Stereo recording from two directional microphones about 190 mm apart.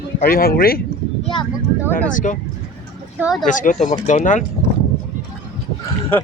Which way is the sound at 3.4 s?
40° left (ahead or behind).